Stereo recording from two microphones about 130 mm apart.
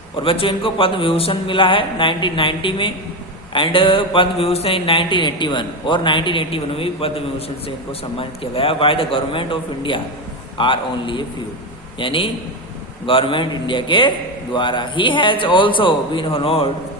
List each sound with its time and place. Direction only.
0.2 s mantra: 40° left (ahead or behind)
8.2 s a man's voice: 45° left (ahead or behind)
10.6 s mantra: 40° left (ahead or behind)